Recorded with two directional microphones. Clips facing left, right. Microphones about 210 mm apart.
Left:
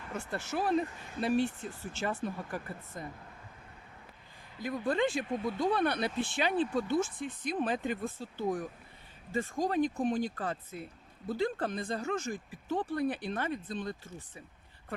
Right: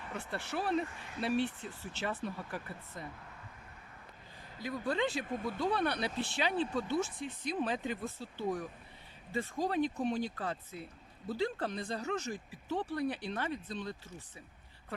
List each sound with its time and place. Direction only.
0.1 s speech: 45° left (ahead or behind)
4.6 s speech: 50° left (ahead or behind)